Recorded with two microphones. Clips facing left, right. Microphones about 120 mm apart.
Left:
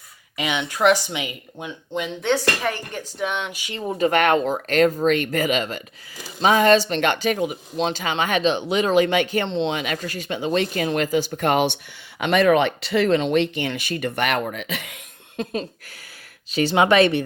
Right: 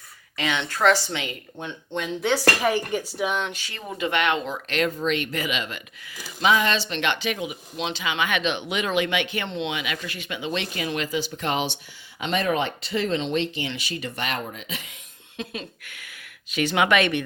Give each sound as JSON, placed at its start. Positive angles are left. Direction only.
{"t": 0.3, "sound": "a woman's voice", "side_deg": 15}
{"t": 3.5, "sound": "speech", "side_deg": 15}
{"t": 3.9, "sound": "speech", "side_deg": 40}
{"t": 12.2, "sound": "speech", "side_deg": 70}
{"t": 15.4, "sound": "speech", "side_deg": 35}